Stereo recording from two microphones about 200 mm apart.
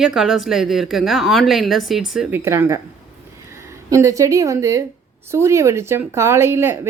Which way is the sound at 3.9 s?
15° right (ahead or behind).